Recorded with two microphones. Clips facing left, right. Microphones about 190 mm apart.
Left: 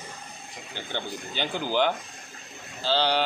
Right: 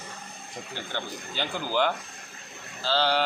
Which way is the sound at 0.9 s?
20° left (ahead or behind).